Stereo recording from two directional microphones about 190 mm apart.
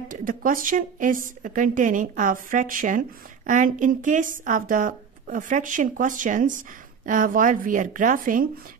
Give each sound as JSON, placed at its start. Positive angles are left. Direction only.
{"t": 0.1, "sound": "a woman's voice", "side_deg": -45}